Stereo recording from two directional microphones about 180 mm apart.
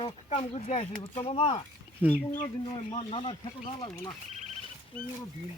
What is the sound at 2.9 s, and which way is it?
Speech, 30° left (ahead or behind).